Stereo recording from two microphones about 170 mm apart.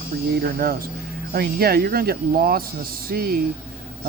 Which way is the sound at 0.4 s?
60° right (ahead or behind).